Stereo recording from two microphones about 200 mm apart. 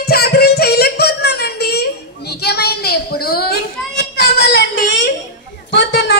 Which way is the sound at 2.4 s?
55° left (ahead or behind).